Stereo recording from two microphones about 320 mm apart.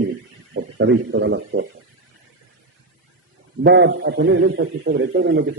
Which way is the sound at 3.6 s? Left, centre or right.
Right.